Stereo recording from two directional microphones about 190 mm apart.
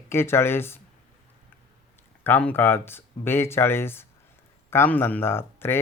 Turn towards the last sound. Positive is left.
turn(degrees=10)  # may be behind; listen again after turning